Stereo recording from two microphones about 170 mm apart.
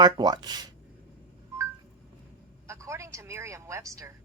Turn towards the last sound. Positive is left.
turn(degrees=-20)  # may be behind; listen again after turning